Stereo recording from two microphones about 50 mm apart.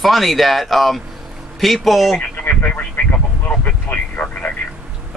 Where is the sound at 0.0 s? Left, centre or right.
Centre.